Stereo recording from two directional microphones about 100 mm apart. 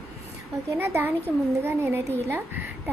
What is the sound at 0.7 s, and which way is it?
A woman's voice, 25° right (ahead or behind).